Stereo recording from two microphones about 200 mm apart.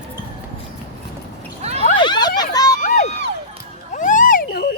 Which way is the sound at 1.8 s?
25° left (ahead or behind).